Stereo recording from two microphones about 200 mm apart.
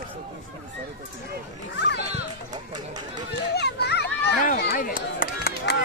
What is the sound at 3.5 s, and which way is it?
Children playing, 55° left (ahead or behind).